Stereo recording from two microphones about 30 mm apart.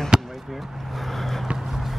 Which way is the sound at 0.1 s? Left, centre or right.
Centre.